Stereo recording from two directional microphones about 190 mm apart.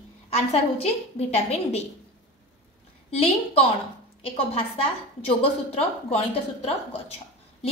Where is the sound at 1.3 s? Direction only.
30° left (ahead or behind).